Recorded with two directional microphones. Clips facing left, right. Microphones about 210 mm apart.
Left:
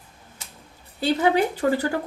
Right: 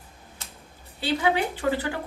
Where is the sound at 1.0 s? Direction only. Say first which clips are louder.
Left 4 dB; 40° left (ahead or behind).